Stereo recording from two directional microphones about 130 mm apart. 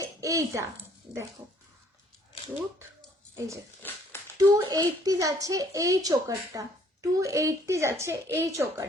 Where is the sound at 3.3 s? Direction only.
25° right (ahead or behind).